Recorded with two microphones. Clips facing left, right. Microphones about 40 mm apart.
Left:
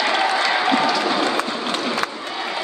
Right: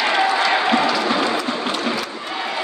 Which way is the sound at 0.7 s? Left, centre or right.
Right.